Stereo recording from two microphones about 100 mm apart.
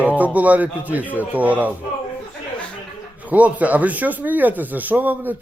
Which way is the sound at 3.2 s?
15° right (ahead or behind).